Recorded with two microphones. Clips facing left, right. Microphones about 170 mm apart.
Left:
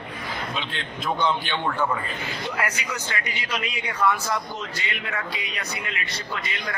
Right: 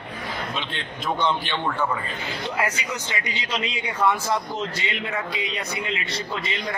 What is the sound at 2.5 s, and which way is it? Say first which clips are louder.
A man's voice: right 3 dB; 20° right (ahead or behind).